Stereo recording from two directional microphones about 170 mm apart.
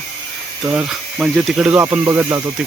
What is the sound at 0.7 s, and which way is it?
Speech, 5° right (ahead or behind).